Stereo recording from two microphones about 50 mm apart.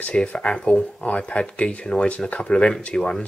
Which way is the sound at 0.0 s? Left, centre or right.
Left.